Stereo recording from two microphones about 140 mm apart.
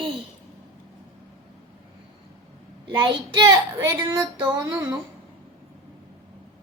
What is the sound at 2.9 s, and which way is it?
Speech, 35° right (ahead or behind).